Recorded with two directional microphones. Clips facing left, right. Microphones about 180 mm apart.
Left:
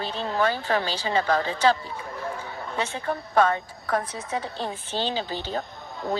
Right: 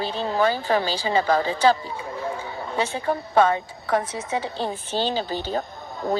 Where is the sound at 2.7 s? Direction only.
35° right (ahead or behind).